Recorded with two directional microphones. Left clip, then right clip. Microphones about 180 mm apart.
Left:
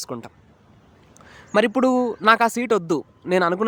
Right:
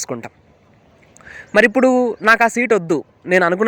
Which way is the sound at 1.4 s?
5° right (ahead or behind).